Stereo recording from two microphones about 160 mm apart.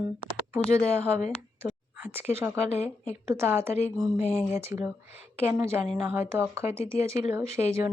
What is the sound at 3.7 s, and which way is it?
Speech, 40° left (ahead or behind).